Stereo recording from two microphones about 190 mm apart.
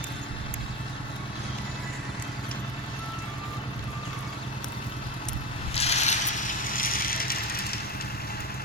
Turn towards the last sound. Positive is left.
turn(degrees=50)  # may be behind; listen again after turning